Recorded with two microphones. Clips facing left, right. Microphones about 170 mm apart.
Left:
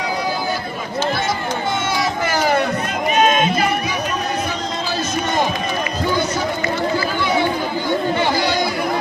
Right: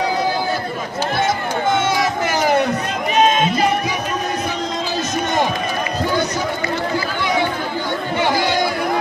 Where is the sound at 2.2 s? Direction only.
20° right (ahead or behind).